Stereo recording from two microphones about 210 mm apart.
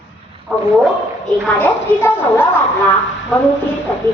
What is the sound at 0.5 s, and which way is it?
Speech, 5° right (ahead or behind).